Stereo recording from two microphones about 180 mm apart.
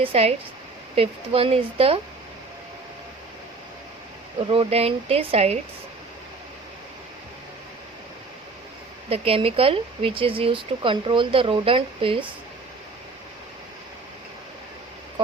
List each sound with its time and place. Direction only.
0.0 s speech: 35° right (ahead or behind)
4.4 s speech: 30° right (ahead or behind)
9.0 s speech: 30° right (ahead or behind)